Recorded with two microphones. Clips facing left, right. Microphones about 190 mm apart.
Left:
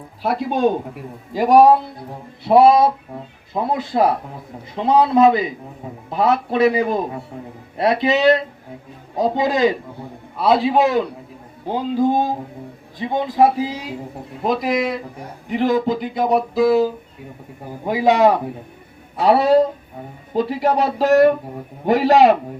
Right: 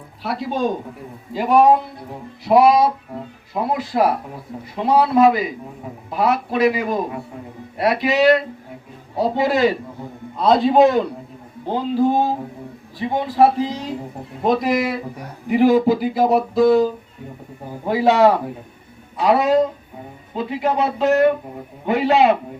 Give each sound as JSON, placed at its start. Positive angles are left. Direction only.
{"t": 1.3, "sound": "speech", "side_deg": 40}
{"t": 2.4, "sound": "a man's voice", "side_deg": 25}
{"t": 10.3, "sound": "speech", "side_deg": 5}
{"t": 11.7, "sound": "speech", "side_deg": 15}
{"t": 17.8, "sound": "speech", "side_deg": 15}
{"t": 19.2, "sound": "speech", "side_deg": 30}